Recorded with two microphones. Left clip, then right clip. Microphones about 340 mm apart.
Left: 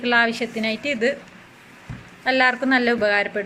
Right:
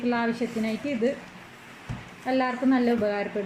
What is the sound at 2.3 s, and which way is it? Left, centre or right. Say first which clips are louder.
Speech: left 7 dB; left.